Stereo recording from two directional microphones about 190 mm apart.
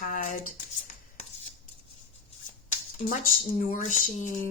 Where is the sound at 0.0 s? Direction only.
45° left (ahead or behind).